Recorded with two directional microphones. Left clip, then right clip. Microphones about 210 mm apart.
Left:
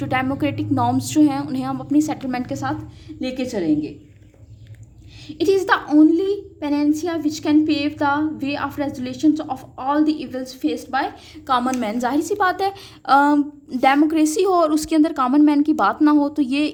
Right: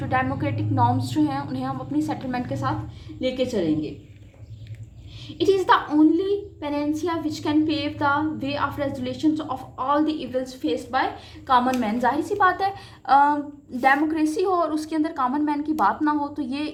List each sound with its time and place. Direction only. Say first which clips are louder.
0.0 s a woman's voice: left 3 dB; 50° left (ahead or behind)
5.4 s a woman's voice: left 1 dB; 50° left (ahead or behind)